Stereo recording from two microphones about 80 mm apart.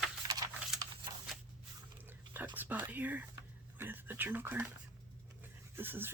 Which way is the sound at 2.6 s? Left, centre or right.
Right.